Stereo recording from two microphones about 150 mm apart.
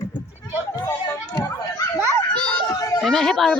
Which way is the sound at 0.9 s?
15° left (ahead or behind).